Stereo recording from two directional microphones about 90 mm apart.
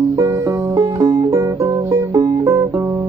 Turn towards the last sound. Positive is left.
turn(degrees=-30)  # may be behind; listen again after turning